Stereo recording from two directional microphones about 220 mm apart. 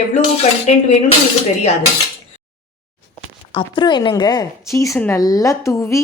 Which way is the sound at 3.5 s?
20° left (ahead or behind).